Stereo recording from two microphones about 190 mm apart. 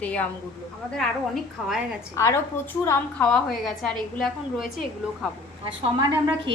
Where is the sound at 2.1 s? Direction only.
15° left (ahead or behind).